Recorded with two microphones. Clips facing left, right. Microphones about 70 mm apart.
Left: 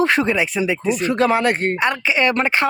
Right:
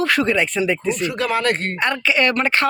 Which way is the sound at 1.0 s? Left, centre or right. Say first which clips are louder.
Left 4 dB; left.